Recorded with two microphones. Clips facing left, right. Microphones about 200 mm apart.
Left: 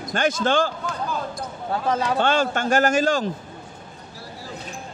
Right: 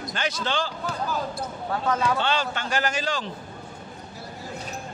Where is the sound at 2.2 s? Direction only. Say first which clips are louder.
Left 6 dB; 50° left (ahead or behind).